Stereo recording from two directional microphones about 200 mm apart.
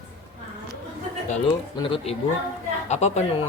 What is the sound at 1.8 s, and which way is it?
Speech, 25° left (ahead or behind).